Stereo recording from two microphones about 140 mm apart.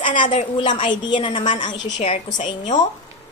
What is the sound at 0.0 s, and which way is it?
Speech, 65° left (ahead or behind).